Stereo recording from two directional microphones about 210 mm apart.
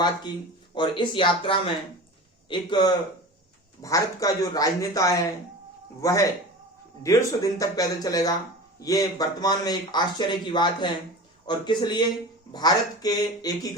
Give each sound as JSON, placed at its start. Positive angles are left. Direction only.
{"t": 0.7, "sound": "speech", "side_deg": 20}